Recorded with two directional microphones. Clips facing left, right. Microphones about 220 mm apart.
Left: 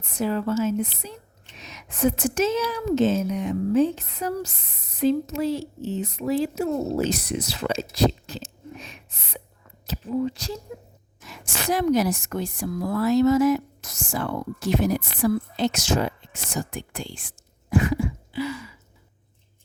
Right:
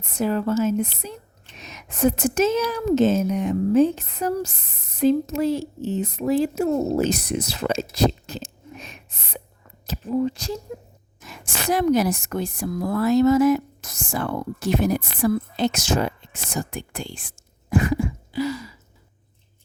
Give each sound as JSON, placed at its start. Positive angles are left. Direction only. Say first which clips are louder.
{"t": 0.0, "sound": "speech", "louder": "right 2 dB", "side_deg": -45}